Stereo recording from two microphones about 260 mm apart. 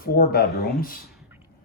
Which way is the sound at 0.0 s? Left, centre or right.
Left.